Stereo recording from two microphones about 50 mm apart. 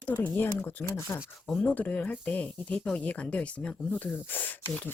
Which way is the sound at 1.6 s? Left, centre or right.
Left.